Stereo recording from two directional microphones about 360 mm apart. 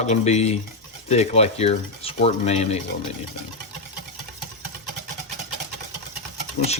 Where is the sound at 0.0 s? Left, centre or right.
Centre.